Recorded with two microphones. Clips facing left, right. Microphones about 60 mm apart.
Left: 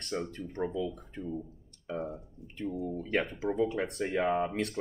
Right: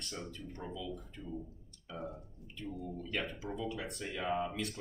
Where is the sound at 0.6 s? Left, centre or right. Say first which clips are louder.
Left 10 dB; left.